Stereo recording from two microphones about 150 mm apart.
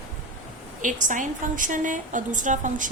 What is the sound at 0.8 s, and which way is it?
A woman's voice, 60° right (ahead or behind).